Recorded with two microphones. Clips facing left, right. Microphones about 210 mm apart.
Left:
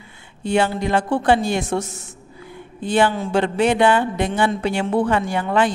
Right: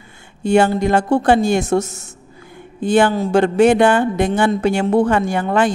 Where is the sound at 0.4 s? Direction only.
45° right (ahead or behind).